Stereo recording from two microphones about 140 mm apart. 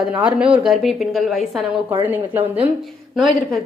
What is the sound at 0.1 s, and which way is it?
A woman's voice, 5° right (ahead or behind).